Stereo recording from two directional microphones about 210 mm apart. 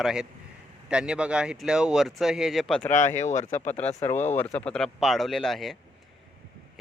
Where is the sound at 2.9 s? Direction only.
35° left (ahead or behind).